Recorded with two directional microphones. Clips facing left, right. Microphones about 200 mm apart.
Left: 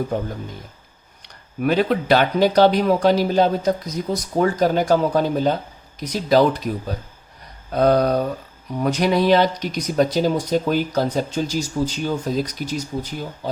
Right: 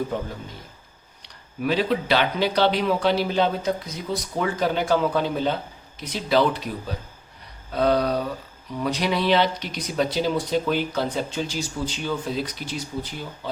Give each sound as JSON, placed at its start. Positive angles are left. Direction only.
{"t": 1.2, "sound": "speech", "side_deg": 50}